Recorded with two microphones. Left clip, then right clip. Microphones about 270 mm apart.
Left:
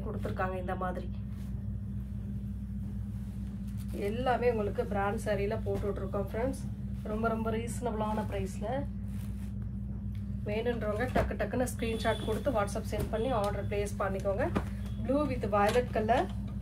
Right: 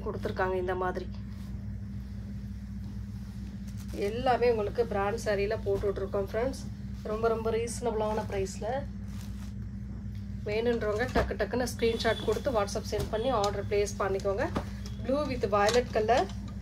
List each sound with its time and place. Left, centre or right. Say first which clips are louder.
0.2 s speech: right 5 dB; right
4.0 s a woman's voice: right 3 dB; right
7.2 s a woman's voice: right 5 dB; right
10.4 s a woman's voice: right 4 dB; right